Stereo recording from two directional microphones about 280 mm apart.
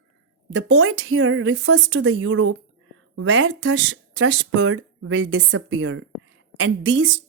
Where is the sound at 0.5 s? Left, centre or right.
Right.